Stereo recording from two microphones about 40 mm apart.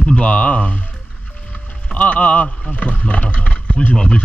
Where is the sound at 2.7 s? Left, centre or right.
Left.